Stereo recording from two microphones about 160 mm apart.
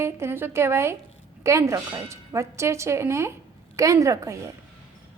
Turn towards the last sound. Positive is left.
turn(degrees=-20)  # may be behind; listen again after turning